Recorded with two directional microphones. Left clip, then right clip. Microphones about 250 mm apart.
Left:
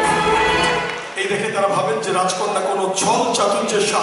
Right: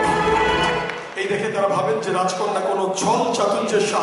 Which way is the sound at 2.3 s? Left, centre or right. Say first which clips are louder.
Left 2 dB; centre.